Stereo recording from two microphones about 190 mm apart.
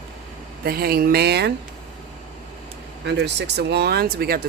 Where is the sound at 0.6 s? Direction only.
55° right (ahead or behind).